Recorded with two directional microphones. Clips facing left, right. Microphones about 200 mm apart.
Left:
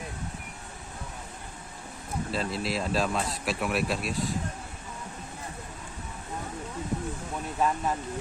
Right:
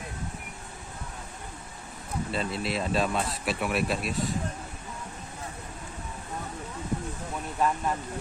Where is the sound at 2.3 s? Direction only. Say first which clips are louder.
Even; centre (ahead or behind).